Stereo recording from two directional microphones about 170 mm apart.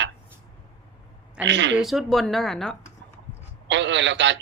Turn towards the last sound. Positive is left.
turn(degrees=-90)